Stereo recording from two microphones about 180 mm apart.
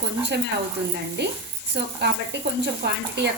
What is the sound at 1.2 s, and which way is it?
Speech, 70° right (ahead or behind).